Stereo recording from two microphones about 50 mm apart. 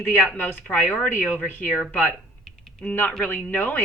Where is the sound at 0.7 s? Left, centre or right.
Left.